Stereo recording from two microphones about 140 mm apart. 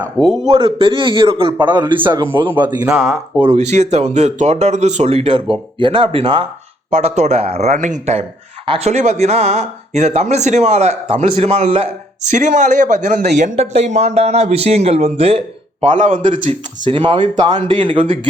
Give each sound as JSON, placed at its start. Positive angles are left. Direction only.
{"t": 0.4, "sound": "speech", "side_deg": -40}
{"t": 2.6, "sound": "speech", "side_deg": -10}
{"t": 3.4, "sound": "speech", "side_deg": -50}
{"t": 6.9, "sound": "speech", "side_deg": -50}
{"t": 8.6, "sound": "speech", "side_deg": -40}
{"t": 8.9, "sound": "speech", "side_deg": -55}
{"t": 12.3, "sound": "speech", "side_deg": -60}
{"t": 16.0, "sound": "a man's voice", "side_deg": -65}
{"t": 16.8, "sound": "speech", "side_deg": -35}